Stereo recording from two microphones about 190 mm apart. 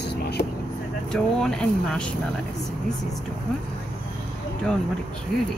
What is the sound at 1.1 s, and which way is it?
Speech, 5° left (ahead or behind).